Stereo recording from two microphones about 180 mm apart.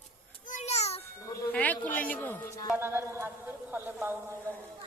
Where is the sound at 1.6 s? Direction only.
10° left (ahead or behind).